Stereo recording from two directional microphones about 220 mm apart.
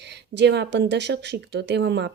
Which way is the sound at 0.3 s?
50° right (ahead or behind).